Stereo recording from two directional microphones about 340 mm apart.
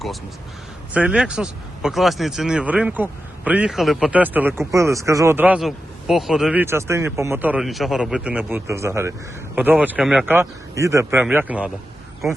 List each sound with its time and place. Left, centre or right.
0.9 s speech: centre